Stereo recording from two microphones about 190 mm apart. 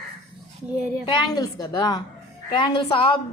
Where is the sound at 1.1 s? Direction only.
20° left (ahead or behind).